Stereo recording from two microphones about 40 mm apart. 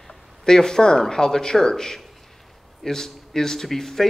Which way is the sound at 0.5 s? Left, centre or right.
Centre.